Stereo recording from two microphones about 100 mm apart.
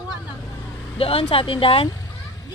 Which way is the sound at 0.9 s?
70° left (ahead or behind).